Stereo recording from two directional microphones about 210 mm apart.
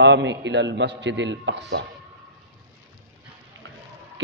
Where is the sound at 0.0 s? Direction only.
55° right (ahead or behind).